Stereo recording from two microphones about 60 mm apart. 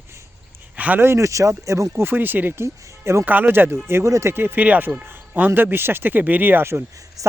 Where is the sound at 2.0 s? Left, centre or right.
Right.